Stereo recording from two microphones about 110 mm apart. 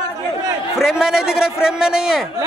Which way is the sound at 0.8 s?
5° right (ahead or behind).